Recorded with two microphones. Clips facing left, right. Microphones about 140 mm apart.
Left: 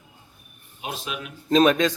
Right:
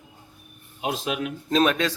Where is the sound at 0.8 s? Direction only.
90° right.